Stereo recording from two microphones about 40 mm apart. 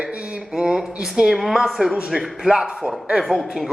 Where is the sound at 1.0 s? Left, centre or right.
Centre.